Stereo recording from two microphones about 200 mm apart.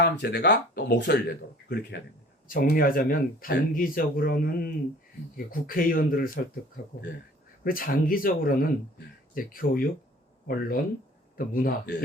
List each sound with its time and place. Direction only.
0.0 s speech: 55° left (ahead or behind)
2.5 s speech: 45° left (ahead or behind)
7.6 s speech: 45° left (ahead or behind)